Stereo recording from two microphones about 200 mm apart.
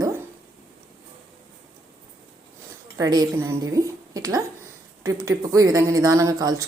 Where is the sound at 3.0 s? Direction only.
20° right (ahead or behind).